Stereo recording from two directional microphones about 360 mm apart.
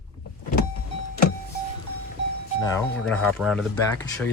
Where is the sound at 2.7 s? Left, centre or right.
Centre.